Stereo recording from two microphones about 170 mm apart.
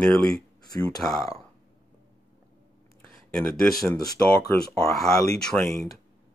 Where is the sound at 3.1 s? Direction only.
Centre (ahead or behind).